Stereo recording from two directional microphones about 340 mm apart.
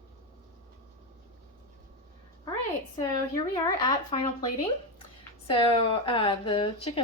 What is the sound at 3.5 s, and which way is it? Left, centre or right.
A woman's voice, centre.